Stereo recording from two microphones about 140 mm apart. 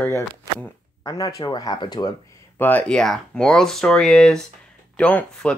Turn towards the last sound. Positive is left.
turn(degrees=10)  # may be behind; listen again after turning